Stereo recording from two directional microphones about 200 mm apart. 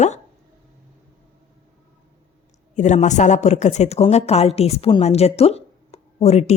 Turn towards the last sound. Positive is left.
turn(degrees=35)  # may be behind; listen again after turning